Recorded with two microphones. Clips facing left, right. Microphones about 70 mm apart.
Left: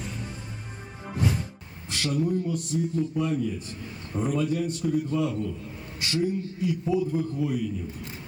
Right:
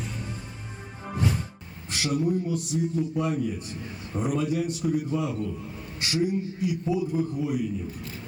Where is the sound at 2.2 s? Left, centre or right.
Centre.